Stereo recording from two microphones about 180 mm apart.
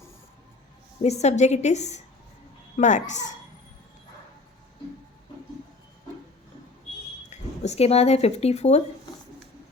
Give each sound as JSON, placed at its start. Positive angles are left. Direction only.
{"t": 1.0, "sound": "a woman's voice", "side_deg": 35}
{"t": 7.3, "sound": "speech", "side_deg": 40}